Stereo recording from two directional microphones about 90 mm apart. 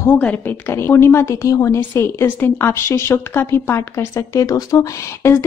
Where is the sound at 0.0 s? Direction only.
20° left (ahead or behind); by 4.8 s 40° left (ahead or behind).